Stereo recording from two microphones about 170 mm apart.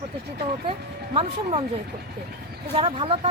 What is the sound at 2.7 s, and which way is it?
Speech, 30° right (ahead or behind).